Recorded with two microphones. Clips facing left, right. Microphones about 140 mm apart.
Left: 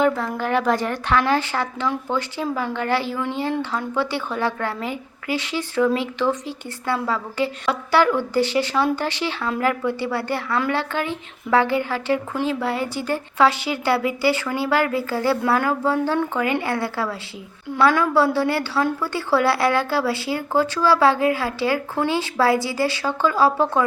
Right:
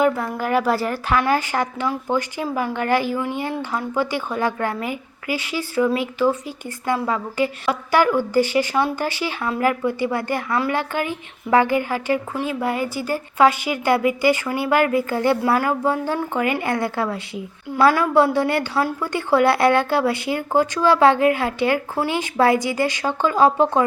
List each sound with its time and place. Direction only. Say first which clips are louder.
0.0 s a woman's voice: right 1 dB; 10° right (ahead or behind)